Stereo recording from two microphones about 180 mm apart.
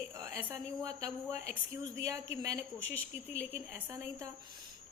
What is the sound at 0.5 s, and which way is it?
A woman's voice, 15° right (ahead or behind).